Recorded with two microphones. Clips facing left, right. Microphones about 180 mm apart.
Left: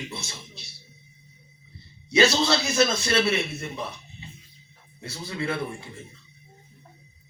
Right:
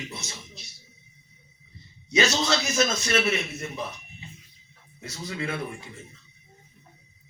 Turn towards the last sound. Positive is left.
turn(degrees=30)  # may be behind; listen again after turning